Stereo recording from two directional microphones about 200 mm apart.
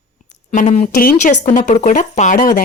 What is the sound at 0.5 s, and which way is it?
A woman's voice, 35° left (ahead or behind).